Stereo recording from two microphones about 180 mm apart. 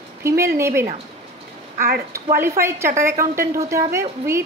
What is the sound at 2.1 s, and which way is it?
A woman's voice, 15° right (ahead or behind).